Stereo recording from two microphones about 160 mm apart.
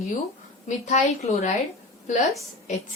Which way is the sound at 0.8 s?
45° left (ahead or behind).